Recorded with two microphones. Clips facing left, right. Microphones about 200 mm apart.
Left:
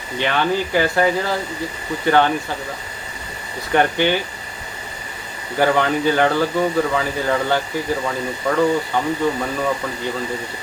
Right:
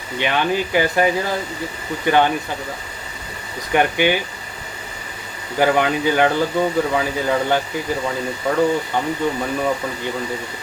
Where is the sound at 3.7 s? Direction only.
15° right (ahead or behind).